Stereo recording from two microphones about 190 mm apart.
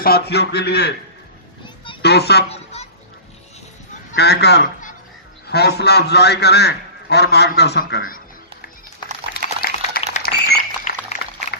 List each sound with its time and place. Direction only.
0.0 s a man's voice: 55° left (ahead or behind)
1.6 s children playing: 25° left (ahead or behind)
2.0 s a woman's voice: 60° left (ahead or behind)
4.1 s a man's voice: 60° left (ahead or behind)
9.3 s a sound: 55° left (ahead or behind)
10.9 s a sound: 40° left (ahead or behind)